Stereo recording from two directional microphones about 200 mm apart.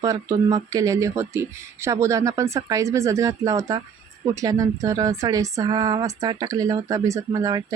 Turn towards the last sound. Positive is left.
turn(degrees=-15)  # may be behind; listen again after turning